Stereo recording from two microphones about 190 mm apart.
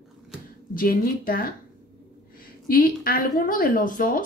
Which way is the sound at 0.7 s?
50° left (ahead or behind).